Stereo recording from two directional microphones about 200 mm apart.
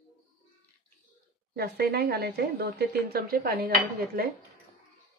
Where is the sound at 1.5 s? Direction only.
50° right (ahead or behind).